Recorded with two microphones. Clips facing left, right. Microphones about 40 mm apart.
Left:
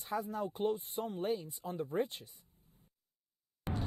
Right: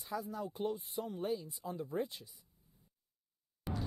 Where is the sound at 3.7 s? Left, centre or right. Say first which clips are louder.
Left 2 dB; left.